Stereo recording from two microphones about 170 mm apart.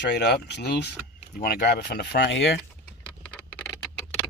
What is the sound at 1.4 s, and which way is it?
Speech, 65° left (ahead or behind).